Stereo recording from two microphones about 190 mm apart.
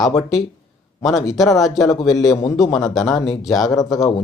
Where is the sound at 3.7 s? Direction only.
20° left (ahead or behind).